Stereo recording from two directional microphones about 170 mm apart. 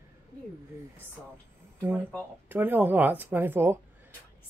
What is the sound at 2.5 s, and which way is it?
Speech, 10° right (ahead or behind).